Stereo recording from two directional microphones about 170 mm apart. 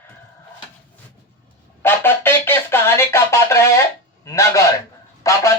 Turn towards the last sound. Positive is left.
turn(degrees=20)  # may be behind; listen again after turning